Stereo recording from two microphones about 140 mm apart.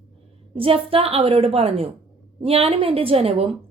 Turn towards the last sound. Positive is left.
turn(degrees=-45)  # may be behind; listen again after turning